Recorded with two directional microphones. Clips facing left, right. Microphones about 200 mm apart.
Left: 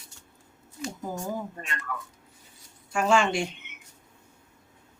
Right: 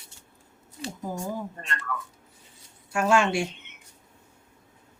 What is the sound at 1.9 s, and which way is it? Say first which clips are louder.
Speech: right 3 dB; 10° left (ahead or behind).